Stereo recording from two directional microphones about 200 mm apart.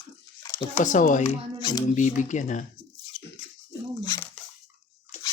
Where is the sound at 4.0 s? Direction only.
20° left (ahead or behind).